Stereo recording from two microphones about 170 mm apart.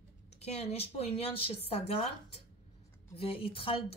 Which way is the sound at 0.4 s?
40° left (ahead or behind).